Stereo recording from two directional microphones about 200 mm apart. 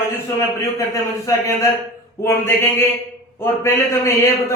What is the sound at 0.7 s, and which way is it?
Speech, 15° left (ahead or behind).